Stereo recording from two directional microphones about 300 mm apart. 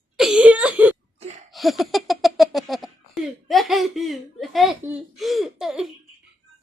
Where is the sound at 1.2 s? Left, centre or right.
Right.